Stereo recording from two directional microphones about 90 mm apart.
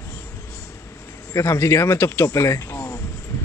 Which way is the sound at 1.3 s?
35° left (ahead or behind).